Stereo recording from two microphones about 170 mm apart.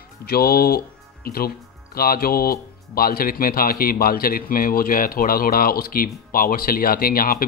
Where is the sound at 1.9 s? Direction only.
60° left (ahead or behind).